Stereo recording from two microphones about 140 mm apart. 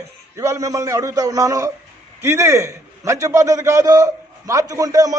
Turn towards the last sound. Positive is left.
turn(degrees=-25)  # may be behind; listen again after turning